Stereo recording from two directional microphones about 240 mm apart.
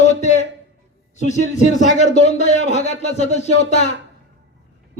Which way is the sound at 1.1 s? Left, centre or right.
Left.